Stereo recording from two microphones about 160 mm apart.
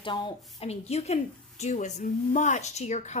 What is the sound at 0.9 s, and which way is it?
A woman's voice, 40° left (ahead or behind).